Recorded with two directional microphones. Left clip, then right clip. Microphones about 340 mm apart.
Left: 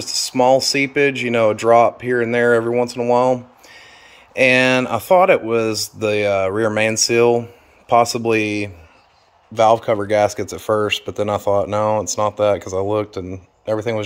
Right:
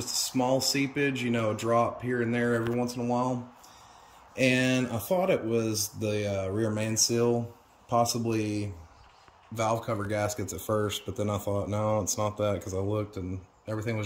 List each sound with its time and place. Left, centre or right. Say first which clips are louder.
0.0 s a sound: left 12 dB; centre
0.6 s speech: left 12 dB; centre
9.7 s speech: left 14 dB; left
10.7 s speech: left 12 dB; centre